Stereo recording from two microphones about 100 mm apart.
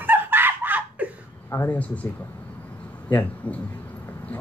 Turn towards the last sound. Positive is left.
turn(degrees=20)  # may be behind; listen again after turning